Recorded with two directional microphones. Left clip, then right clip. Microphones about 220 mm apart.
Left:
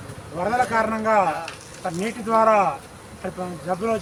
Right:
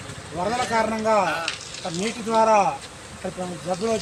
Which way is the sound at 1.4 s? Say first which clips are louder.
Right 1 dB; 35° left (ahead or behind).